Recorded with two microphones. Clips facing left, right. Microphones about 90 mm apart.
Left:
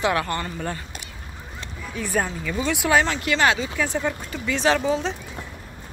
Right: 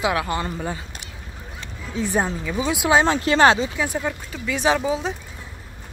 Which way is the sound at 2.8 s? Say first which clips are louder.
Right 3 dB; 25° right (ahead or behind).